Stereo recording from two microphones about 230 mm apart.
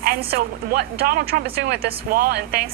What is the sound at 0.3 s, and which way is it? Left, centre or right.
Speech, right.